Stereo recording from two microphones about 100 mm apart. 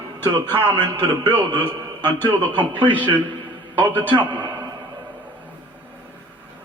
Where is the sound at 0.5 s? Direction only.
50° right (ahead or behind).